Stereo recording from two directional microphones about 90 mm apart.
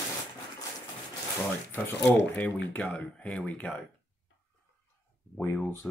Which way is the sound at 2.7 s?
15° left (ahead or behind).